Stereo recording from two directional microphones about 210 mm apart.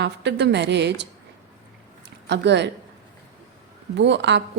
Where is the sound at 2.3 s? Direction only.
55° right (ahead or behind).